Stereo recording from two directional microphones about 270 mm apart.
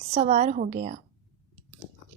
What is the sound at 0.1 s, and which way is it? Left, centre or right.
Speech, right.